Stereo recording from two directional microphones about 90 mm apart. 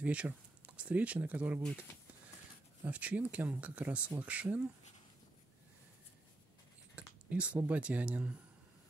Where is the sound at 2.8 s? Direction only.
15° right (ahead or behind).